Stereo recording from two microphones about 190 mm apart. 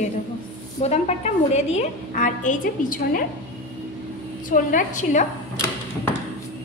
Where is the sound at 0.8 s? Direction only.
35° left (ahead or behind).